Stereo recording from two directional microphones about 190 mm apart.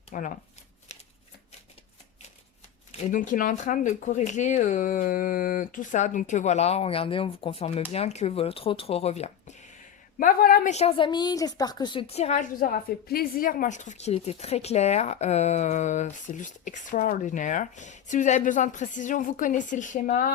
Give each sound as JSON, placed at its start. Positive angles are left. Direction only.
{"t": 0.1, "sound": "speech", "side_deg": 40}
{"t": 2.9, "sound": "a woman's voice", "side_deg": 45}
{"t": 10.2, "sound": "a woman's voice", "side_deg": 45}